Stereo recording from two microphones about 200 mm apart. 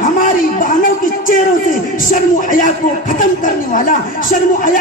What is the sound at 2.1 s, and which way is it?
A man's voice, 40° left (ahead or behind).